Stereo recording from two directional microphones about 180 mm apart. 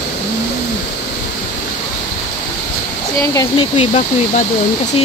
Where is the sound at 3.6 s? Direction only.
35° left (ahead or behind).